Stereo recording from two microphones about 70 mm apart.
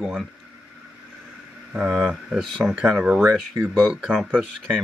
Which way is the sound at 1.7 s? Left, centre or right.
Centre.